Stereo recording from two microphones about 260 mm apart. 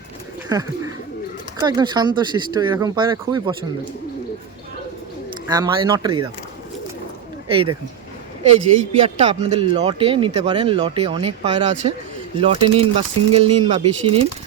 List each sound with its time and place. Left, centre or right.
1.5 s speech: centre
5.5 s speech: centre
8.4 s a man's voice: right